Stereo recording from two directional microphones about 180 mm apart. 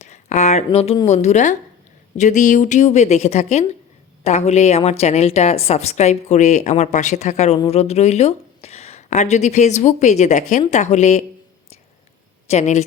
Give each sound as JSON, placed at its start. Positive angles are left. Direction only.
{"t": 0.0, "sound": "a sound", "side_deg": 40}
{"t": 1.0, "sound": "a woman's voice", "side_deg": 40}
{"t": 12.5, "sound": "a woman's voice", "side_deg": 40}